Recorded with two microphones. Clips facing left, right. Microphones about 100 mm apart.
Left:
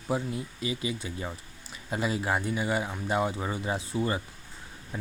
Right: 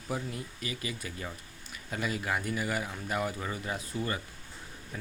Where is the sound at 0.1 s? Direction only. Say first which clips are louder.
Left 5 dB; 25° left (ahead or behind).